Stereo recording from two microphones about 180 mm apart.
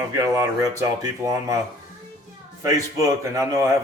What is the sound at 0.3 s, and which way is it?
Speech, 15° right (ahead or behind).